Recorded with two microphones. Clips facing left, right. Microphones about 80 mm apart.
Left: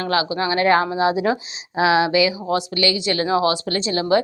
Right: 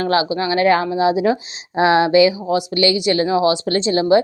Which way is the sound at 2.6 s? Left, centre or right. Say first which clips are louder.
Right 4 dB; right.